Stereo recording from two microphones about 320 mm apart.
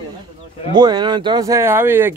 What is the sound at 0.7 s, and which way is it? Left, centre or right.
Speech, centre.